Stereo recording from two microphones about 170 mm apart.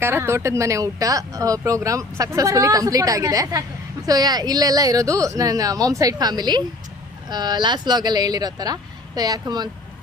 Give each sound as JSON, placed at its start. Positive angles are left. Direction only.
{"t": 0.0, "sound": "speech", "side_deg": -15}